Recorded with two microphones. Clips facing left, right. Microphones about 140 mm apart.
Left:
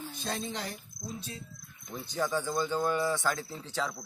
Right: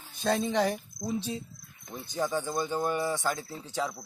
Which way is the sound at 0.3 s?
65° right (ahead or behind).